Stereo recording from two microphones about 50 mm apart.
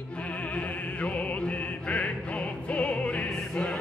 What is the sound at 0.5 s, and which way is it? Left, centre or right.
Music, left.